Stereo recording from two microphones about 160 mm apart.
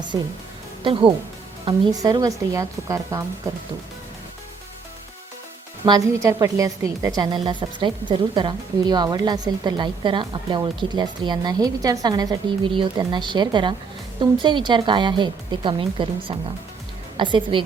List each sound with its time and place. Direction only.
1.6 s speech: 25° right (ahead or behind)
5.8 s a woman's voice: 25° right (ahead or behind)